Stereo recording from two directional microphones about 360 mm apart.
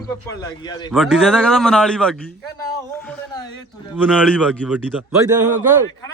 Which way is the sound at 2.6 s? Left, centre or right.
Centre.